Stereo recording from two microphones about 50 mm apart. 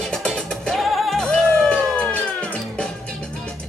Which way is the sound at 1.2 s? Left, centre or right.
Centre.